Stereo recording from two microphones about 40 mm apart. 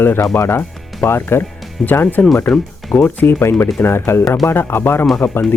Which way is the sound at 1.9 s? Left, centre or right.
Left.